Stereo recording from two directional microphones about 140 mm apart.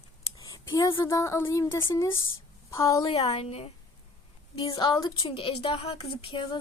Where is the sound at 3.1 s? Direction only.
45° left (ahead or behind).